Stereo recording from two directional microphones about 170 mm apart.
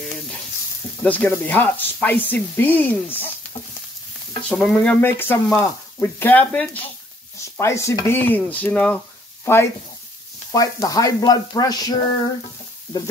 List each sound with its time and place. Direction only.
0.0 s frying: 5° left (ahead or behind)
1.0 s speech: 10° left (ahead or behind)
4.5 s speech: 5° left (ahead or behind); by 12.0 s 20° left (ahead or behind)